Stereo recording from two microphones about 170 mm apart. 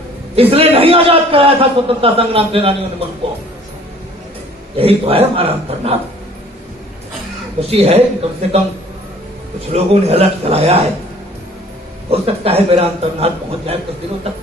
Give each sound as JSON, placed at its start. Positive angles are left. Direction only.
{"t": 0.3, "sound": "a man's voice", "side_deg": -35}
{"t": 4.8, "sound": "a man's voice", "side_deg": -35}
{"t": 7.7, "sound": "a man's voice", "side_deg": -35}
{"t": 9.7, "sound": "a man's voice", "side_deg": -40}
{"t": 12.1, "sound": "a man's voice", "side_deg": -35}